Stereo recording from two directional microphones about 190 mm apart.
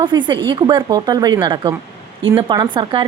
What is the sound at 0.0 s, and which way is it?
A woman's voice, 25° right (ahead or behind).